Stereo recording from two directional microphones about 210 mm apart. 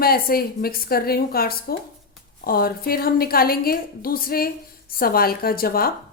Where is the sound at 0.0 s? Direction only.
45° left (ahead or behind).